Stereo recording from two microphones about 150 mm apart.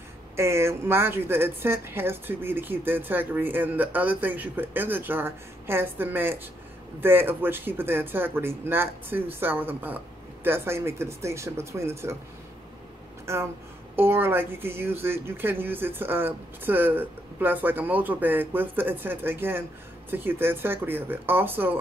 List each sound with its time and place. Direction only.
0.4 s a woman's voice: 15° right (ahead or behind)
13.2 s a woman's voice: 15° right (ahead or behind)